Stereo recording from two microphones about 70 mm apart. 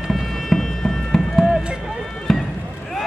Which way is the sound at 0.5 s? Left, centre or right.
Centre.